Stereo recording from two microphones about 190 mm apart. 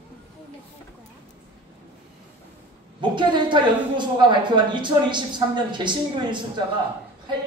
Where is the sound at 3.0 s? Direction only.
25° right (ahead or behind).